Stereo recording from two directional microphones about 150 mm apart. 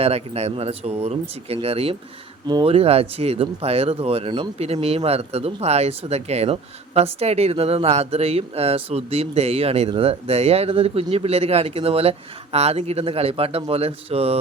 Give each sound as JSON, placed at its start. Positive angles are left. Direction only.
{"t": 0.0, "sound": "speech", "side_deg": -45}